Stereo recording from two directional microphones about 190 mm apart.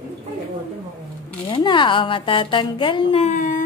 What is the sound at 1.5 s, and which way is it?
A woman's voice, 25° left (ahead or behind).